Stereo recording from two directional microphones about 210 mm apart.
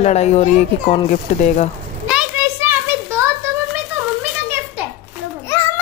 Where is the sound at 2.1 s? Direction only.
10° right (ahead or behind).